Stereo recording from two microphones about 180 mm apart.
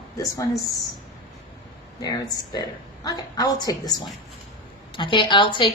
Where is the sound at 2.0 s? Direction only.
20° left (ahead or behind).